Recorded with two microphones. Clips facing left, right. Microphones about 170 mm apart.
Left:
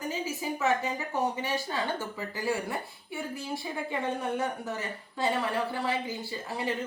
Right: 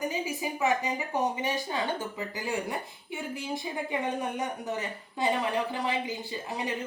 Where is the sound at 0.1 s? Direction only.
15° right (ahead or behind).